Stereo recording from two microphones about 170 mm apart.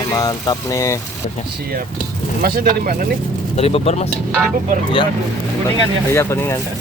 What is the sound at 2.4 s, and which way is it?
Speech, 60° right (ahead or behind).